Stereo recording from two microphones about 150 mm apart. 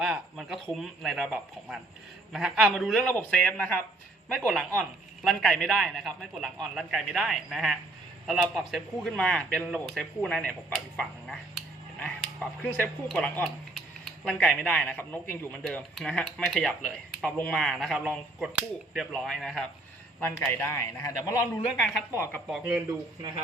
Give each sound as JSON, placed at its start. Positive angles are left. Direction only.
{"t": 0.0, "sound": "a man's voice", "side_deg": -5}
{"t": 20.2, "sound": "a man's voice", "side_deg": 15}